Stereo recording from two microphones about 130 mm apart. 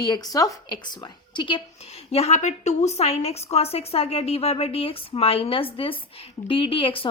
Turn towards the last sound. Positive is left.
turn(degrees=45)  # may be behind; listen again after turning